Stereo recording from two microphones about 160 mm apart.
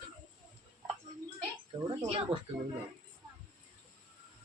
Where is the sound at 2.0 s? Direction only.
35° right (ahead or behind).